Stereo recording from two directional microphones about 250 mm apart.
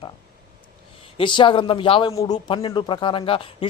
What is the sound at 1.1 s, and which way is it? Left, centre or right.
A man's voice, centre.